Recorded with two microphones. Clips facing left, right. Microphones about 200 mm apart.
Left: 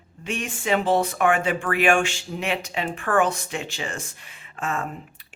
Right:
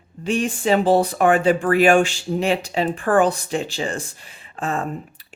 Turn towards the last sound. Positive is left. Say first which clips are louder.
# right 4 dB
turn(degrees=-35)  # may be behind; listen again after turning